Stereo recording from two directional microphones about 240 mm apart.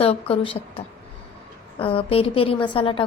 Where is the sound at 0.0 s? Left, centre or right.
Left.